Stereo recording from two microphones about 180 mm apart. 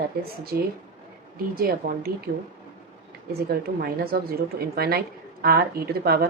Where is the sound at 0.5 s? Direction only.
60° right (ahead or behind).